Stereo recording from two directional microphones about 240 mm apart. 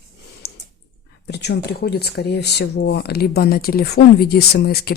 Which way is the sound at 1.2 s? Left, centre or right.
Left.